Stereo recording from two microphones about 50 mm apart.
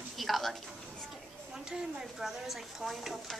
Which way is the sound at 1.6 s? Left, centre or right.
Centre.